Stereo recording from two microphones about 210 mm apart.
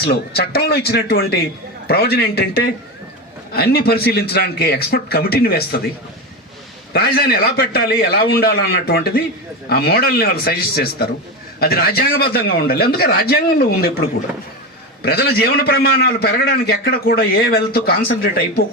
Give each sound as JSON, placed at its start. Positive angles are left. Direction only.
{"t": 0.0, "sound": "a man's voice", "side_deg": 50}
{"t": 6.9, "sound": "a man's voice", "side_deg": 45}
{"t": 15.0, "sound": "a man's voice", "side_deg": 50}